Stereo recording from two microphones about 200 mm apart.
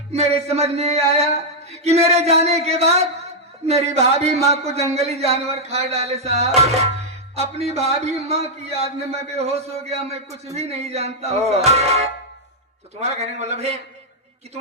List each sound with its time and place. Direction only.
0.1 s a man's voice: 30° right (ahead or behind)